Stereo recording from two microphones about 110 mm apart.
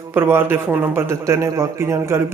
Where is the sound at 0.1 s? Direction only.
20° right (ahead or behind).